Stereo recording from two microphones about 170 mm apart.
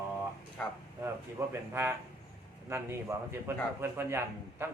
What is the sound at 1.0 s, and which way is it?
A man's voice, 15° right (ahead or behind).